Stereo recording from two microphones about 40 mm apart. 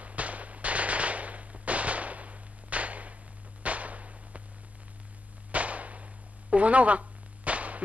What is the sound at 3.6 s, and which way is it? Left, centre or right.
Whip, right.